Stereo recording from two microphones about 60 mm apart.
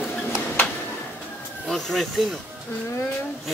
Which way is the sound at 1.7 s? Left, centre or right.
Centre.